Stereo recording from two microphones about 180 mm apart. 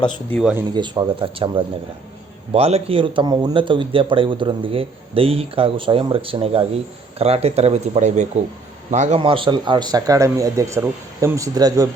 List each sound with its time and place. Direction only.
0.3 s speech: 5° left (ahead or behind)
0.7 s a man's voice: 25° right (ahead or behind)